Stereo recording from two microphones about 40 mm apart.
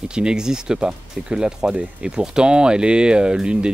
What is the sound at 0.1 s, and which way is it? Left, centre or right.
Speech, right.